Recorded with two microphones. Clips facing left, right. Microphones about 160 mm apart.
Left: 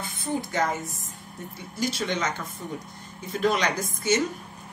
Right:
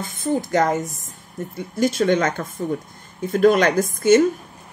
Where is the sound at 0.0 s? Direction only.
45° right (ahead or behind).